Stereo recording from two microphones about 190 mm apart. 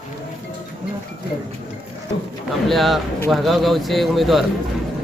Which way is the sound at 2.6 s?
Centre (ahead or behind).